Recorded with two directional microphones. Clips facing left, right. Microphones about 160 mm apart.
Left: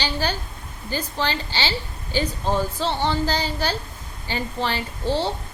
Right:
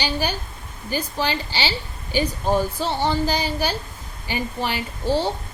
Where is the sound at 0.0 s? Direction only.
10° right (ahead or behind).